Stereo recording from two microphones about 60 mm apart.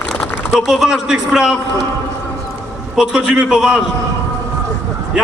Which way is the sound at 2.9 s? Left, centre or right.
Centre.